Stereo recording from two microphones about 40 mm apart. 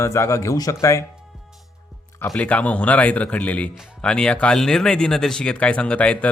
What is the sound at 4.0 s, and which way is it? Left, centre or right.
Speech, left.